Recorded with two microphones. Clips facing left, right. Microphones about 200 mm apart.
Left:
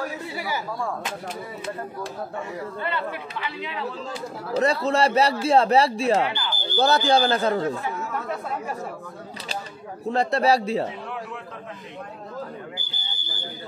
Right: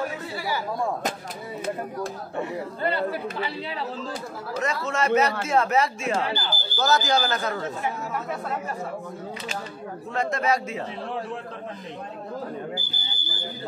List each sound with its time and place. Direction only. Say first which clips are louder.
2.8 s speech: right 6 dB; 35° right (ahead or behind)
4.6 s a man's voice: left 6 dB; 35° left (ahead or behind)
6.2 s speech: left 1 dB; 35° right (ahead or behind)
6.8 s a man's voice: left 3 dB; 30° left (ahead or behind)
10.0 s a man's voice: left 5 dB; 35° left (ahead or behind)